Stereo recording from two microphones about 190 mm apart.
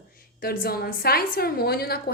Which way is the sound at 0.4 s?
55° left (ahead or behind).